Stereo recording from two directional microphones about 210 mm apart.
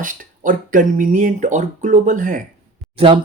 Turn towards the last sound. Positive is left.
turn(degrees=-25)  # may be behind; listen again after turning